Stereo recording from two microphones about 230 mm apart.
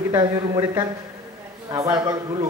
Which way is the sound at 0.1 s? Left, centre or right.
Centre.